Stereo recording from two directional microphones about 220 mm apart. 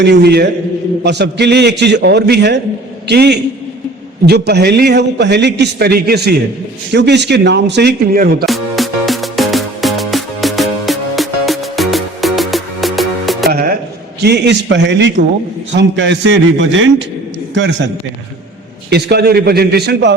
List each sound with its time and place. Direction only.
0.0 s a man's voice: 50° right (ahead or behind)
8.4 s music: centre (ahead or behind)
13.5 s music: 40° right (ahead or behind)
14.2 s a man's voice: 50° right (ahead or behind)
18.9 s a man's voice: 50° right (ahead or behind)